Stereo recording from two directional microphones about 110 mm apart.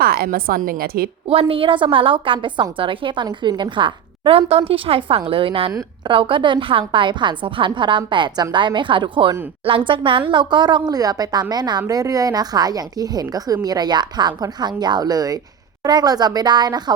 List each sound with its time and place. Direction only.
1.3 s a woman's voice: 60° right (ahead or behind); by 16.9 s 40° right (ahead or behind)